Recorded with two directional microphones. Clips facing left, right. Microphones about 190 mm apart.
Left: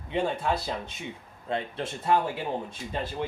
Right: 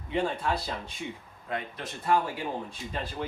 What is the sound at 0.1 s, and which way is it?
Speech, 25° left (ahead or behind).